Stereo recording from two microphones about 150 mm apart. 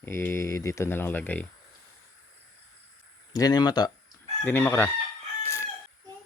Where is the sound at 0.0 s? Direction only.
15° left (ahead or behind).